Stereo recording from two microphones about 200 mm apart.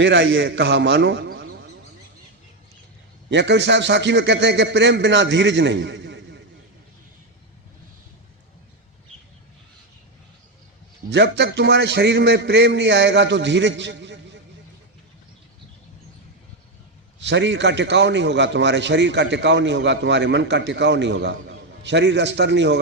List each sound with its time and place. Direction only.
0.0 s a man's voice: 60° right (ahead or behind)
3.2 s a man's voice: 60° right (ahead or behind)
11.1 s a man's voice: 60° right (ahead or behind)
17.2 s a man's voice: 65° right (ahead or behind)